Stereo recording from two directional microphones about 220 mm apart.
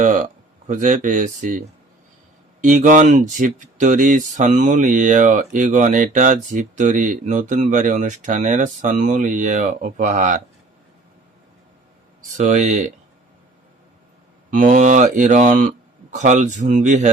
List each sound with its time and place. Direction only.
0.0 s speech: 35° right (ahead or behind)
12.4 s speech: 35° right (ahead or behind)
14.5 s speech: 35° right (ahead or behind)